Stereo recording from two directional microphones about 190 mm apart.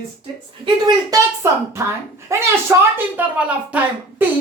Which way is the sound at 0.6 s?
15° right (ahead or behind).